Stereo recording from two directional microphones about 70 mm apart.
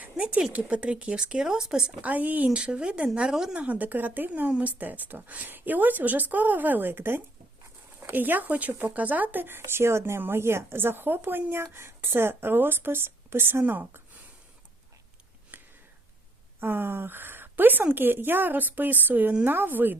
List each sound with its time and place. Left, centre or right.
0.0 s a woman's voice: centre
2.0 s speech: right
3.6 s a woman's voice: right
9.6 s speech: right
15.5 s a sound: right
16.6 s a woman's voice: right